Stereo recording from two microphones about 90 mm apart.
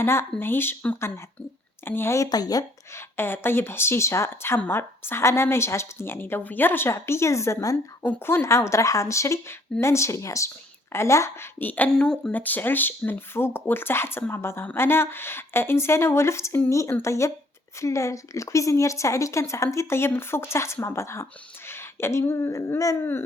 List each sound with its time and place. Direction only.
0.0 s speech: 25° left (ahead or behind)
2.3 s speech: 45° left (ahead or behind)
2.9 s speech: 25° left (ahead or behind)
8.0 s a woman's voice: 25° left (ahead or behind)
11.6 s speech: 20° left (ahead or behind)
12.3 s a woman's voice: 20° left (ahead or behind)